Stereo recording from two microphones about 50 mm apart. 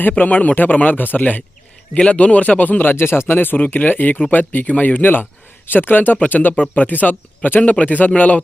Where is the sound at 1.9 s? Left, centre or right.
Left.